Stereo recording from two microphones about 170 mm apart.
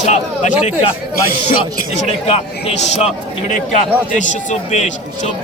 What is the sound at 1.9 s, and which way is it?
A man's voice, 40° left (ahead or behind).